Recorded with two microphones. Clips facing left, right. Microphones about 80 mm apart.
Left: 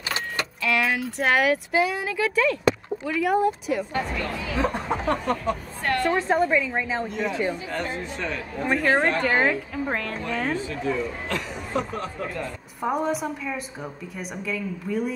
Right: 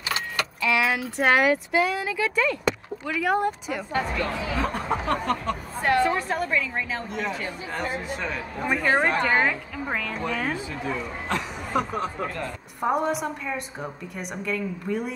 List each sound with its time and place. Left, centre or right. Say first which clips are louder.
0.6 s speech: even; centre
4.6 s a woman's voice: left 3 dB; centre
5.8 s a sound: right 4 dB; centre
6.1 s a woman's voice: left 4 dB; left
7.7 s a woman's voice: even; centre
9.4 s a woman's voice: left 2 dB; centre
10.1 s a woman's voice: left 1 dB; centre
12.8 s speech: right 1 dB; centre